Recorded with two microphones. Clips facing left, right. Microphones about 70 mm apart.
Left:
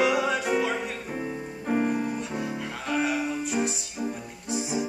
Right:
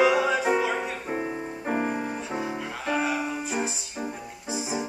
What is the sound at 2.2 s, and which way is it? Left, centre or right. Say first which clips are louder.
Music: right 1 dB; centre.